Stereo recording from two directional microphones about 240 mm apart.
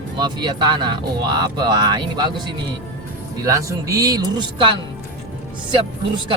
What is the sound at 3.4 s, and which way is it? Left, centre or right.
Speech, centre.